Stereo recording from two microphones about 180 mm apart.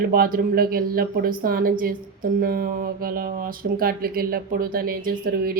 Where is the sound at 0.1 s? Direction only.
55° right (ahead or behind).